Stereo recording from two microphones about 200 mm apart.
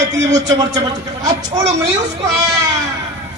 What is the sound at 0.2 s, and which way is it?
Speech, 15° right (ahead or behind).